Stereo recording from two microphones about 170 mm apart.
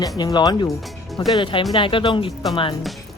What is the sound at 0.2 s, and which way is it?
Speech, 25° left (ahead or behind).